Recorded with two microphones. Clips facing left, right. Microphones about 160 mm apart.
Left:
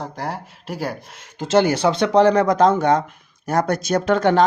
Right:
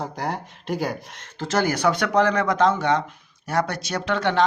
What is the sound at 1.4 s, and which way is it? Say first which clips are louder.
Speech: left 5 dB; 25° left (ahead or behind).